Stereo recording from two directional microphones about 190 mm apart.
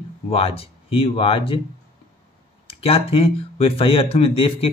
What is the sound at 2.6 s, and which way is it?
Speech, 30° left (ahead or behind).